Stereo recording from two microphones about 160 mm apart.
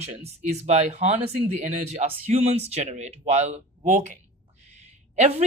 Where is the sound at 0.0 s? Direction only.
40° right (ahead or behind).